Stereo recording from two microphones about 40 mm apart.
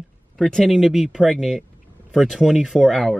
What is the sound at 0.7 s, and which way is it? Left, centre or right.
Speech, centre.